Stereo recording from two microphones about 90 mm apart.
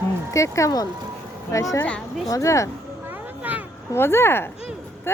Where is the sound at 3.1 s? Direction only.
20° right (ahead or behind).